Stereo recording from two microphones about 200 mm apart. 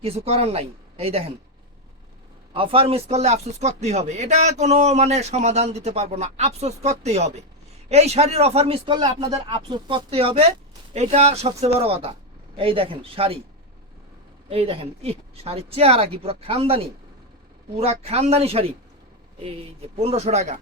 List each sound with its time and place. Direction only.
0.0 s speech: 30° right (ahead or behind)
2.5 s speech: 25° right (ahead or behind)
14.5 s speech: 30° right (ahead or behind)
20.0 s speech: 30° right (ahead or behind)